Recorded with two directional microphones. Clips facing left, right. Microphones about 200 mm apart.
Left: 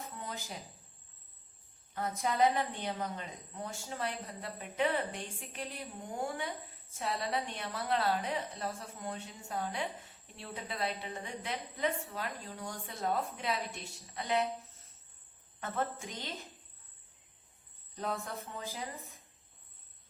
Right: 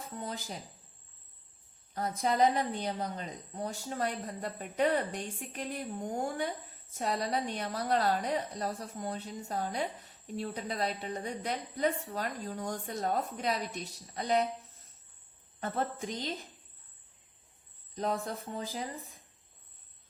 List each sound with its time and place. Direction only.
1.9 s a woman's voice: 35° right (ahead or behind)
15.6 s a woman's voice: 35° right (ahead or behind)
17.9 s a woman's voice: 35° right (ahead or behind)